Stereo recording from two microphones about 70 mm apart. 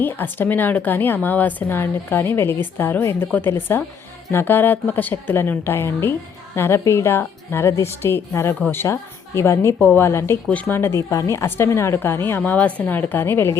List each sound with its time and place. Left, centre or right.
0.0 s a woman's voice: left
11.1 s a woman's voice: left
11.9 s a woman's voice: left
12.5 s a woman's voice: left